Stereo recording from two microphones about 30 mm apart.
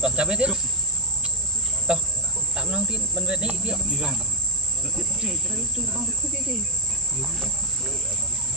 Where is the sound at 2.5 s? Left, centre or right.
Right.